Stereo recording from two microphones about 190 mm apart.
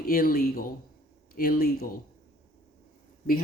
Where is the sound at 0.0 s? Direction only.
50° left (ahead or behind).